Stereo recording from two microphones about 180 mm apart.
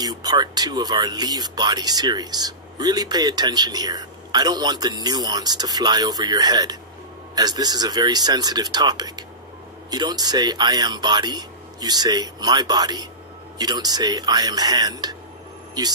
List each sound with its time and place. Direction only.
0.0 s speech: 20° right (ahead or behind)